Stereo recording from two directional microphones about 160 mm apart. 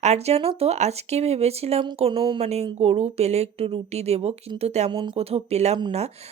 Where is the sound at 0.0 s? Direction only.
45° right (ahead or behind).